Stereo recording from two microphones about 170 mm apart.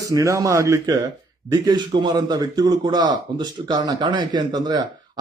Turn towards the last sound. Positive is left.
turn(degrees=-25)  # may be behind; listen again after turning